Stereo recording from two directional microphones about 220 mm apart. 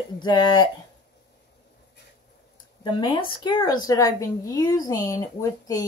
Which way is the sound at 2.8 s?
20° left (ahead or behind).